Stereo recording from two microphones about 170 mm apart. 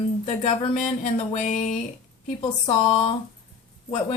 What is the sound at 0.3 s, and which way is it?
A woman's voice, 40° left (ahead or behind).